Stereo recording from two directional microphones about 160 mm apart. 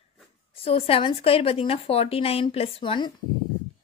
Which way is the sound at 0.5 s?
35° left (ahead or behind).